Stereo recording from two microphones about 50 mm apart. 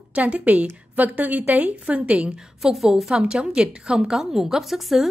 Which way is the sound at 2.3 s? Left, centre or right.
Centre.